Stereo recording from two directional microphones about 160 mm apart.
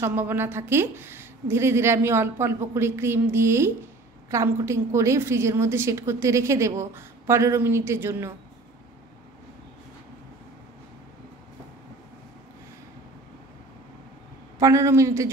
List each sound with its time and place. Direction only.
0.0 s a woman's voice: 15° right (ahead or behind)
14.6 s a man's voice: 20° right (ahead or behind)